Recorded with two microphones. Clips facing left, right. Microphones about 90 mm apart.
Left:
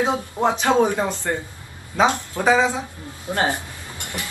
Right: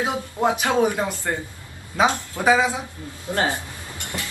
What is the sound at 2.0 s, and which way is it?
Speech, 20° left (ahead or behind).